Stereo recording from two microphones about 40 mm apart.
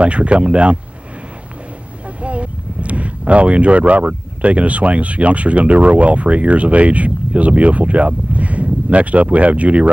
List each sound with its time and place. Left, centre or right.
0.0 s speech: right
2.2 s speech: right